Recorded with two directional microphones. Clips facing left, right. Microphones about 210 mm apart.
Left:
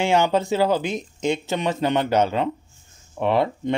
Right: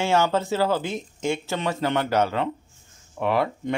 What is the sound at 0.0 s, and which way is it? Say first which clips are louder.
A man's voice: left 2 dB; 15° left (ahead or behind).